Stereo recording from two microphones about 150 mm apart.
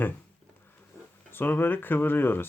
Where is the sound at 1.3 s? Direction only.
15° left (ahead or behind).